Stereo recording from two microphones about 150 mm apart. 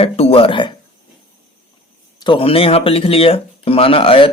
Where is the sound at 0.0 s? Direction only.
40° left (ahead or behind).